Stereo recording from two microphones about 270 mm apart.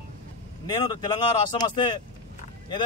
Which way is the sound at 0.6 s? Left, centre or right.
Centre.